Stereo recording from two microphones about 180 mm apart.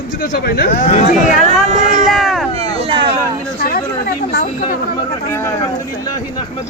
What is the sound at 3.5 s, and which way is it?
Speech, 55° left (ahead or behind).